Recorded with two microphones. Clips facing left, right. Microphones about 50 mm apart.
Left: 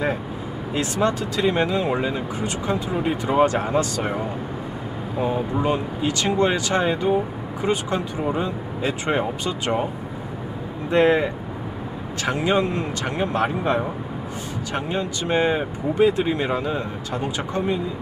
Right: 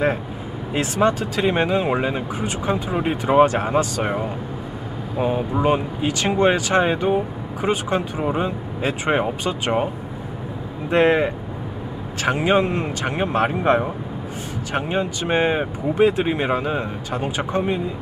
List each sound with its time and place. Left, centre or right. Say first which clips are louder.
0.7 s speech: right 3 dB; right
11.1 s speech: right 1 dB; right